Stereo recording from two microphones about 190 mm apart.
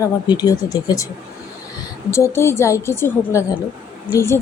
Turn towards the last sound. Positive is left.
turn(degrees=15)  # may be behind; listen again after turning